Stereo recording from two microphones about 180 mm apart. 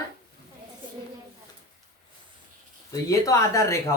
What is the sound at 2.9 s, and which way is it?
Speech, 20° left (ahead or behind).